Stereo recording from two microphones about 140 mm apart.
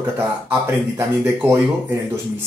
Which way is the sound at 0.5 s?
15° right (ahead or behind).